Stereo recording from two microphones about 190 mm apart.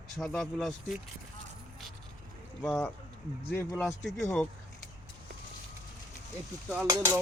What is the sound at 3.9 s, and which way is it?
Speech, centre (ahead or behind).